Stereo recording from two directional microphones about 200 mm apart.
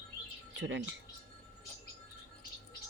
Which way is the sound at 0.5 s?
65° right (ahead or behind).